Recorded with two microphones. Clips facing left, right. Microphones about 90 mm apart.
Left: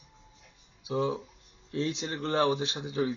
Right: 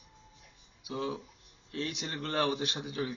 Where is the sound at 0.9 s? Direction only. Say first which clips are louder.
Left 6 dB; 25° left (ahead or behind).